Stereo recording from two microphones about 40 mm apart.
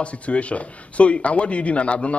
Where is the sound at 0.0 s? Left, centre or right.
Left.